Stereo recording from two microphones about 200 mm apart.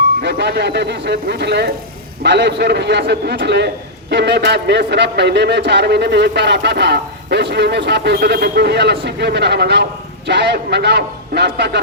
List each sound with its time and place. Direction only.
0.2 s a man's voice: 55° right (ahead or behind)